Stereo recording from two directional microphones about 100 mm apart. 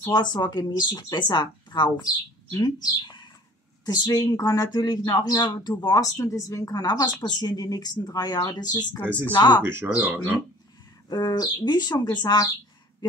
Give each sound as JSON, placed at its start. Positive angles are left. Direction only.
{"t": 0.1, "sound": "speech", "side_deg": 45}
{"t": 9.6, "sound": "speech", "side_deg": -25}
{"t": 11.1, "sound": "speech", "side_deg": 45}